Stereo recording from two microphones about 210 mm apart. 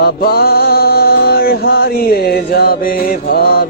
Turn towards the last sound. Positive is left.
turn(degrees=50)  # may be behind; listen again after turning